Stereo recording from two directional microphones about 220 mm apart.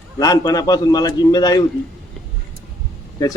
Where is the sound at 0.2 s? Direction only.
15° left (ahead or behind).